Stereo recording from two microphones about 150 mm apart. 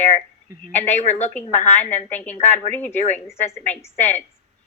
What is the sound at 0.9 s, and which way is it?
Speech, 50° left (ahead or behind).